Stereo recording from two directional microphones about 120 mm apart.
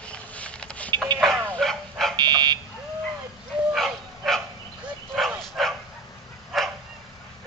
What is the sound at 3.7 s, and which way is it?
Dog, centre (ahead or behind).